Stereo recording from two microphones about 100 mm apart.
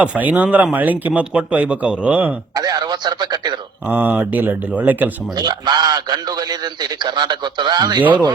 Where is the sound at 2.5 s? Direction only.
40° right (ahead or behind).